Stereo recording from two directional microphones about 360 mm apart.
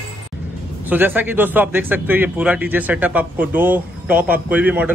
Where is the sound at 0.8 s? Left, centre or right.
Centre.